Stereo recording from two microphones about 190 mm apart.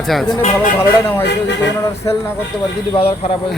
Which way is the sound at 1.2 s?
65° left (ahead or behind).